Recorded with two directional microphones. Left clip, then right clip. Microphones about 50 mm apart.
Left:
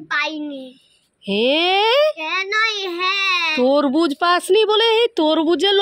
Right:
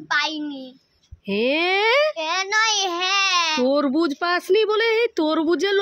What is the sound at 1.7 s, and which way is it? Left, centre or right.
Speech, centre.